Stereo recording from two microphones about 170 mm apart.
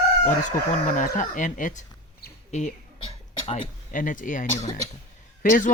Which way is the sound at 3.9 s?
50° left (ahead or behind).